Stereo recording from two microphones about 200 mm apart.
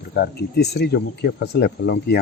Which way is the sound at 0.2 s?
55° left (ahead or behind).